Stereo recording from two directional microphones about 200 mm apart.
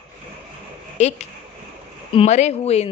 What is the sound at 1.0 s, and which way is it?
Speech, 35° left (ahead or behind).